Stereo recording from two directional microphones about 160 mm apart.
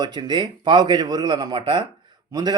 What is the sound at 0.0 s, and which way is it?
Speech, 25° right (ahead or behind).